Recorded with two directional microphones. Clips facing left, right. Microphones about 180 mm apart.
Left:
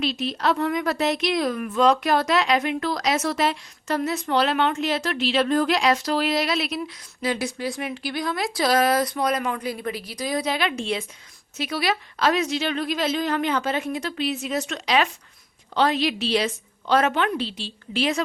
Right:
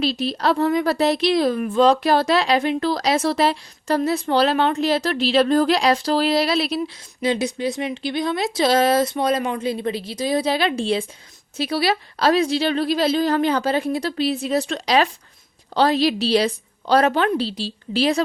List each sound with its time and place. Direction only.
0.0 s a woman's voice: 35° right (ahead or behind)